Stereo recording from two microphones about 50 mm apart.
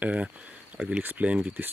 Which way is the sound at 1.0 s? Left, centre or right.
Right.